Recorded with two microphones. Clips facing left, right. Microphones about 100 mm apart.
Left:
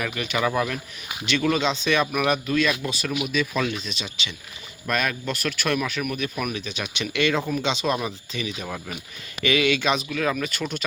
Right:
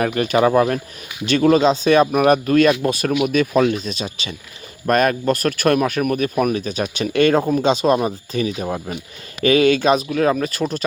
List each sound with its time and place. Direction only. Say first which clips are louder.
0.0 s speech: right 9 dB; 40° right (ahead or behind)
8.6 s speech: right 8 dB; 30° right (ahead or behind)
9.4 s speech: right 8 dB; 40° right (ahead or behind)